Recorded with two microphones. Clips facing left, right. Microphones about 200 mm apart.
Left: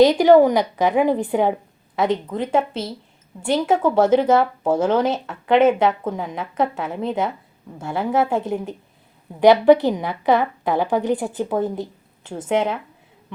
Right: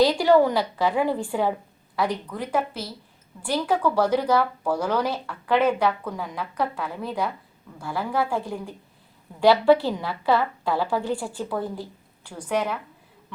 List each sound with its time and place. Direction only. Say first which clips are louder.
0.0 s speech: left 6 dB; 20° left (ahead or behind)